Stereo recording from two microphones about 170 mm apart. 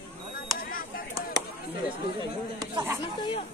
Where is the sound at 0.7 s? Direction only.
55° left (ahead or behind).